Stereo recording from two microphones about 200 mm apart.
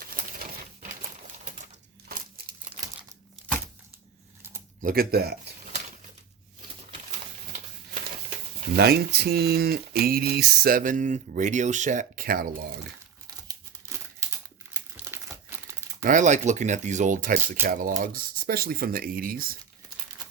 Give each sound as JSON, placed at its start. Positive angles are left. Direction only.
{"t": 0.0, "sound": "coin", "side_deg": -45}
{"t": 4.8, "sound": "speech", "side_deg": -45}
{"t": 8.7, "sound": "speech", "side_deg": -50}
{"t": 14.7, "sound": "crumpling", "side_deg": -10}
{"t": 16.0, "sound": "speech", "side_deg": -40}